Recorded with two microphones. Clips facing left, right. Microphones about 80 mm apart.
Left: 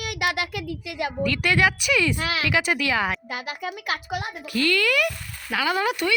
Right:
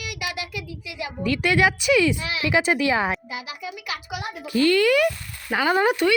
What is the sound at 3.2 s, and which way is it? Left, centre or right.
Speech, left.